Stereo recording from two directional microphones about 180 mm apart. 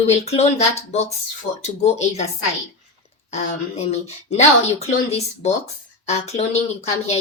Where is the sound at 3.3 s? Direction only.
35° left (ahead or behind).